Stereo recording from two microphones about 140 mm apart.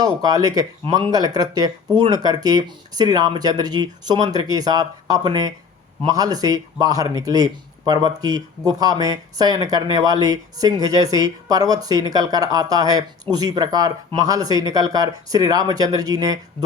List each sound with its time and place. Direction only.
0.0 s a man's voice: 30° right (ahead or behind)